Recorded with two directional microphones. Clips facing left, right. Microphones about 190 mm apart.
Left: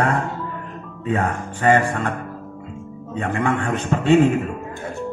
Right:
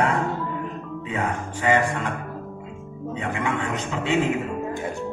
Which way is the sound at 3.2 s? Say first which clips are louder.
Left 5 dB; 55° left (ahead or behind).